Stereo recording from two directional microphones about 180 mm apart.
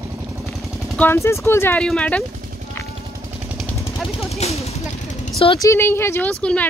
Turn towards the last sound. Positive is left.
turn(degrees=5)  # may be behind; listen again after turning